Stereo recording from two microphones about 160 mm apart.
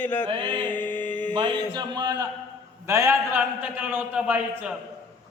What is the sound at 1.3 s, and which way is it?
A man's voice, 30° right (ahead or behind).